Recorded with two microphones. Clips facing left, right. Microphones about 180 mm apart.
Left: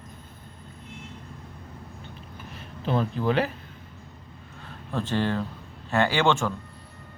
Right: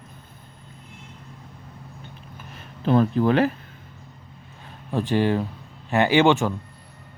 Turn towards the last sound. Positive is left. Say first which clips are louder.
# right 5 dB
turn(degrees=-15)  # may be behind; listen again after turning